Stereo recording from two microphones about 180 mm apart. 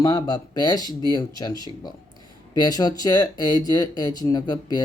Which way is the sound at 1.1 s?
20° left (ahead or behind).